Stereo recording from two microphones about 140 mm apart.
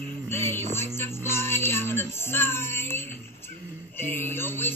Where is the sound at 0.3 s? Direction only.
15° left (ahead or behind).